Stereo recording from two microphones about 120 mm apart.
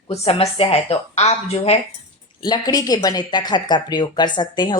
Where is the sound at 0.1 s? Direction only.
55° left (ahead or behind).